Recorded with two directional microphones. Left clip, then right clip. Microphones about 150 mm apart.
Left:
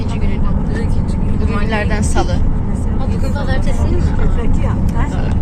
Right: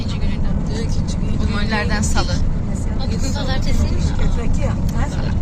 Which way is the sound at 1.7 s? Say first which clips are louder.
Left 1 dB; 25° right (ahead or behind).